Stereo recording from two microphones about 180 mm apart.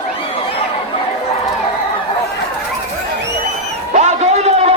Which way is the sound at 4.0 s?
40° right (ahead or behind).